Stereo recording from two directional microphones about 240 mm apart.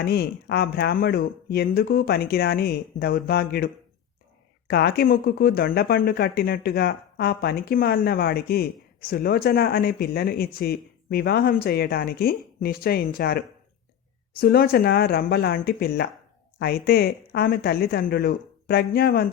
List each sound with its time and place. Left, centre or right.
0.0 s speech: left
4.7 s speech: left